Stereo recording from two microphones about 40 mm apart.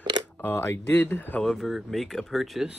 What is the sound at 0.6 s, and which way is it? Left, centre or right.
Speech, left.